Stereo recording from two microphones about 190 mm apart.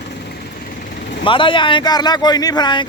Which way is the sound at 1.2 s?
25° left (ahead or behind).